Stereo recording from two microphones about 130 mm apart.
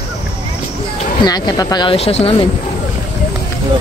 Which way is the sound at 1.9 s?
50° left (ahead or behind).